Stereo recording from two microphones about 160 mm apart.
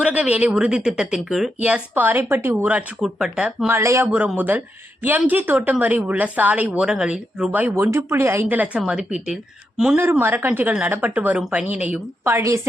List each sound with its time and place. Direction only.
0.0 s a woman's voice: 10° right (ahead or behind)
3.8 s a woman's voice: 15° right (ahead or behind)
10.0 s a woman's voice: 15° right (ahead or behind)